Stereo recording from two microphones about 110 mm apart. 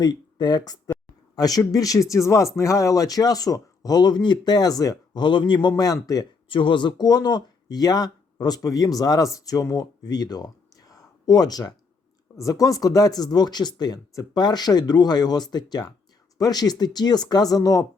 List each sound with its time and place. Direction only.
0.0 s speech: 40° left (ahead or behind)
5.5 s speech: 35° left (ahead or behind)
6.5 s speech: 50° left (ahead or behind); by 17.8 s 30° left (ahead or behind)